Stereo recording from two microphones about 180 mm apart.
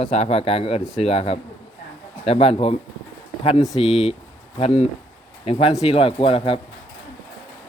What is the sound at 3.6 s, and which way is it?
Speech, centre (ahead or behind).